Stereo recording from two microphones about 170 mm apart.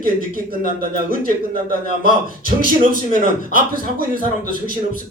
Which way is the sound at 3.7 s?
55° right (ahead or behind).